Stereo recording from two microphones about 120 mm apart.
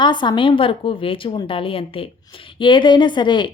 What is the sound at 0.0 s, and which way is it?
A woman's voice, 40° left (ahead or behind).